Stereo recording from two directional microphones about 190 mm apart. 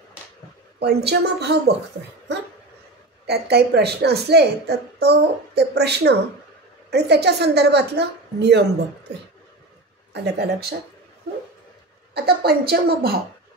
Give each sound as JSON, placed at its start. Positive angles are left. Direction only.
{"t": 0.7, "sound": "a woman's voice", "side_deg": -60}
{"t": 3.3, "sound": "a woman's voice", "side_deg": -60}
{"t": 10.1, "sound": "a woman's voice", "side_deg": -60}
{"t": 12.1, "sound": "a woman's voice", "side_deg": -55}